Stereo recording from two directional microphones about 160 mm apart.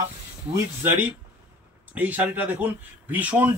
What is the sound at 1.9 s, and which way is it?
Speech, 10° right (ahead or behind).